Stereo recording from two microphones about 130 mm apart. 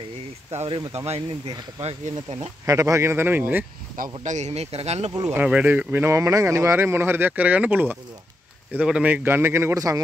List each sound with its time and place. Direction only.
0.7 s speech: 45° right (ahead or behind)
2.6 s speech: 25° right (ahead or behind)
3.9 s speech: 80° right; by 5.1 s 55° right (ahead or behind)
5.3 s speech: 10° right (ahead or behind)